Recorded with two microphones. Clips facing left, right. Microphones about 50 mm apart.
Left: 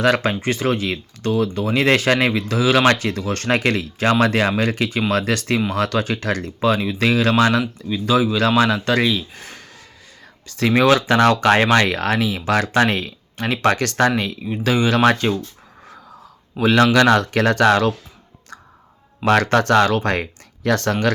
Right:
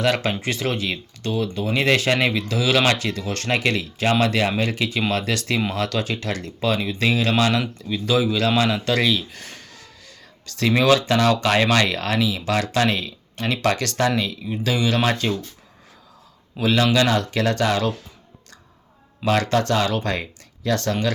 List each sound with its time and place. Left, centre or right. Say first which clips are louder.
0.0 s speech: left 4 dB; left
16.6 s speech: left 4 dB; left
19.2 s speech: left 4 dB; left